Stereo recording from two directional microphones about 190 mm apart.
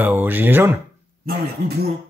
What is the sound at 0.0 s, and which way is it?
Speech, 10° right (ahead or behind).